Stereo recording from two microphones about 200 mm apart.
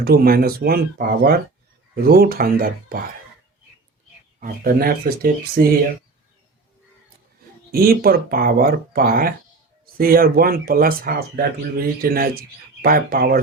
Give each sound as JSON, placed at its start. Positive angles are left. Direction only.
{"t": 0.0, "sound": "speech", "side_deg": -50}
{"t": 4.4, "sound": "speech", "side_deg": -45}
{"t": 7.7, "sound": "speech", "side_deg": -50}